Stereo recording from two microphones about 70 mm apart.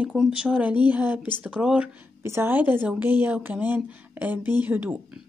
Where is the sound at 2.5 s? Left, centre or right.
Right.